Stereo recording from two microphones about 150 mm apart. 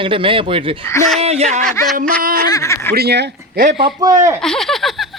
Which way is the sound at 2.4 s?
20° left (ahead or behind).